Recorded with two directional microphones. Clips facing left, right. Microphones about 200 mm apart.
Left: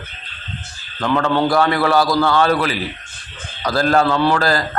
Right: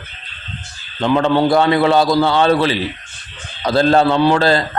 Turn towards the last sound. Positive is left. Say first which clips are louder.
# right 3 dB
turn(degrees=-25)  # may be behind; listen again after turning